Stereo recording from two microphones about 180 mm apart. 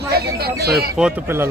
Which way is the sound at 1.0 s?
10° right (ahead or behind).